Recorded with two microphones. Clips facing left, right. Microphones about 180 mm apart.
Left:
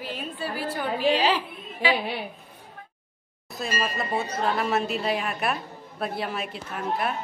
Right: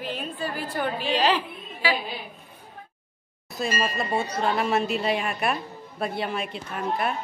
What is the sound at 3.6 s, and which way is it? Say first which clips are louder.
A woman's voice: right 2 dB; centre (ahead or behind).